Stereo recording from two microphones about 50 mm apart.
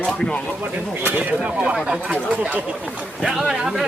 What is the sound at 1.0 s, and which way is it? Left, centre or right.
Speech, right.